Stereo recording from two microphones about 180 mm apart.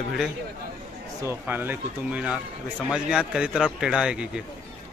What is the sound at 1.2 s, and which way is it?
A man's voice, 15° right (ahead or behind).